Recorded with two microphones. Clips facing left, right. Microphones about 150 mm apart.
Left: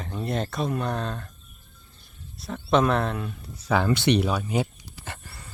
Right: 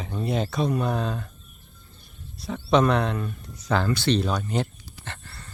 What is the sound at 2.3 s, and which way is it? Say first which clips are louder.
Speech: right 1 dB; centre (ahead or behind).